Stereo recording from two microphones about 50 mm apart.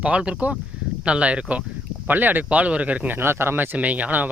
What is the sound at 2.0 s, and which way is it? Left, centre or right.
Speech, right.